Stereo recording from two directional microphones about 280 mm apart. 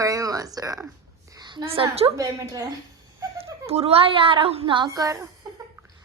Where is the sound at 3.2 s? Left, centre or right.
Centre.